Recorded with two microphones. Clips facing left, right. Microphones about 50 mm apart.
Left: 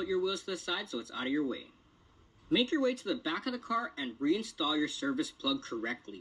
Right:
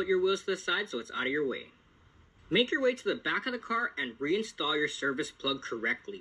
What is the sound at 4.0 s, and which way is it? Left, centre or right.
Speech, right.